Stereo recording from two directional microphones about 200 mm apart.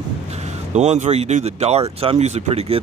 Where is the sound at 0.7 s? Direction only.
35° right (ahead or behind).